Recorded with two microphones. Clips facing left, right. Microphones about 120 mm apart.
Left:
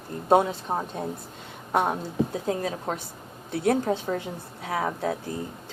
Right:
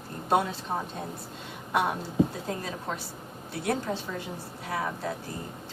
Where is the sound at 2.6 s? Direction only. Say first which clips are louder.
Left 5 dB; 50° left (ahead or behind).